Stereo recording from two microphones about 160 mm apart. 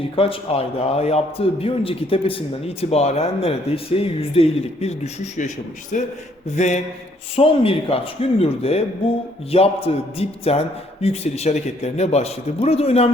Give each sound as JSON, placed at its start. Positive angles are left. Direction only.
{"t": 0.2, "sound": "a man's voice", "side_deg": 35}
{"t": 7.3, "sound": "a man's voice", "side_deg": 35}